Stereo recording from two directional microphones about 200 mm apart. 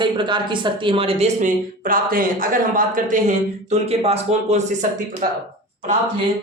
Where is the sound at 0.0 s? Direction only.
25° right (ahead or behind).